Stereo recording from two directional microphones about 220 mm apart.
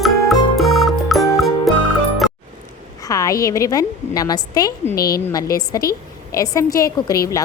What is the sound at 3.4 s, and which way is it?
A woman's voice, 15° left (ahead or behind).